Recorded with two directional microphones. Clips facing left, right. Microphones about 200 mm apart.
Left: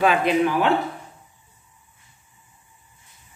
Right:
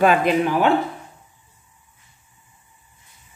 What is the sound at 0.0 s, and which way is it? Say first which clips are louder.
Speech: right 2 dB; 50° right (ahead or behind).